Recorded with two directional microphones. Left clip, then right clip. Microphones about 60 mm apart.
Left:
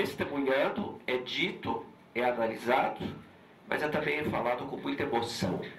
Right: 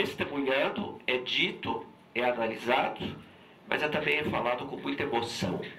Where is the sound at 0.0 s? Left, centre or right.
Left.